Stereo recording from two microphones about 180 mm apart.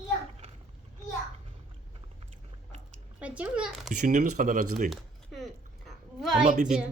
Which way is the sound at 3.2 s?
5° right (ahead or behind).